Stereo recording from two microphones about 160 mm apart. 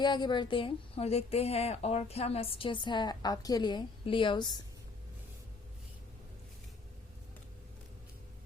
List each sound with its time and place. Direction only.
0.0 s a woman's voice: 30° left (ahead or behind)